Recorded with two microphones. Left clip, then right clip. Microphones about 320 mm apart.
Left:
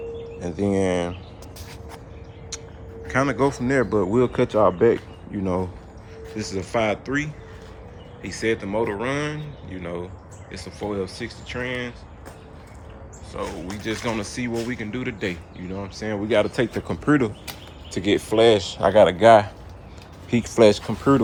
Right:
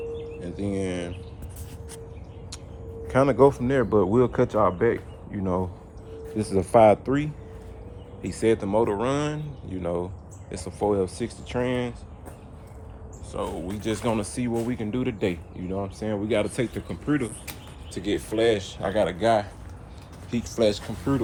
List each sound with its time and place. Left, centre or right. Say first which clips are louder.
0.4 s speech: left 9 dB; centre
3.1 s speech: right 3 dB; centre
6.3 s speech: right 5 dB; centre
13.3 s speech: even; centre
17.9 s speech: left 7 dB; left
20.6 s speech: left 8 dB; left